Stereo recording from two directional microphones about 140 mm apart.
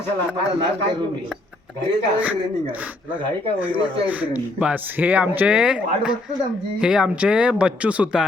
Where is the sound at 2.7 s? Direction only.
10° right (ahead or behind).